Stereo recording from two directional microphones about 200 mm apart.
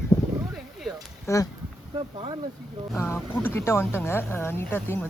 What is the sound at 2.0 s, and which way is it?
Speech, 25° right (ahead or behind).